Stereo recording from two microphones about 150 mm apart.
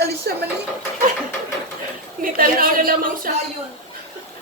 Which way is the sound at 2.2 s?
70° right (ahead or behind).